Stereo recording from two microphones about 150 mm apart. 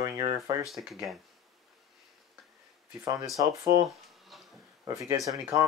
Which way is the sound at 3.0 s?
20° right (ahead or behind).